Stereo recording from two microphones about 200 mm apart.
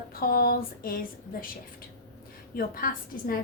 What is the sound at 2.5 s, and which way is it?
Speech, 45° left (ahead or behind).